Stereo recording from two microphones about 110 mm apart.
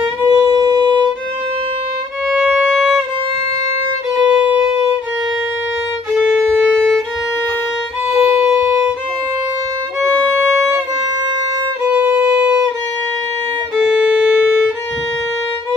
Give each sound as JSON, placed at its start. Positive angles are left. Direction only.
{"t": 0.3, "sound": "violin", "side_deg": -40}
{"t": 2.3, "sound": "violin", "side_deg": -10}
{"t": 4.3, "sound": "music", "side_deg": -10}
{"t": 6.1, "sound": "violin", "side_deg": -5}
{"t": 8.1, "sound": "violin", "side_deg": -10}
{"t": 11.8, "sound": "violin", "side_deg": -15}
{"t": 13.7, "sound": "violin", "side_deg": -5}